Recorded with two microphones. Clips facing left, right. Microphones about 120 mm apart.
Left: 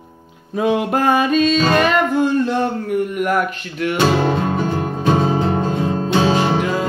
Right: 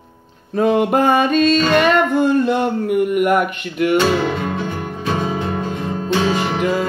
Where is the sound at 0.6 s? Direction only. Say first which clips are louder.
Right 3 dB; centre (ahead or behind).